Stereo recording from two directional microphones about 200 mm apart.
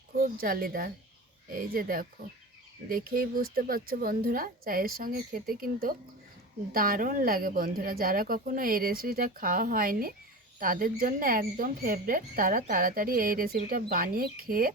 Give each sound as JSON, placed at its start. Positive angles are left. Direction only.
{"t": 0.1, "sound": "speech", "side_deg": -45}